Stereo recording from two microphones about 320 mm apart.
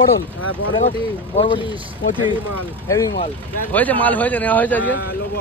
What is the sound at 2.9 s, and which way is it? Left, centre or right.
Speech, centre.